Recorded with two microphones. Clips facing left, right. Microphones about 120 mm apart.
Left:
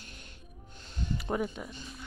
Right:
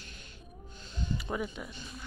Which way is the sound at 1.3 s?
40° left (ahead or behind).